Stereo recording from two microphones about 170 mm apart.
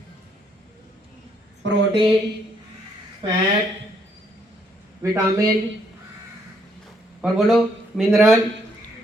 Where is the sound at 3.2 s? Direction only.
30° right (ahead or behind).